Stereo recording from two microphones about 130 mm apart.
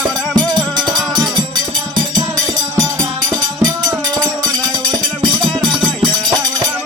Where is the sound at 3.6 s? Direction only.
30° right (ahead or behind).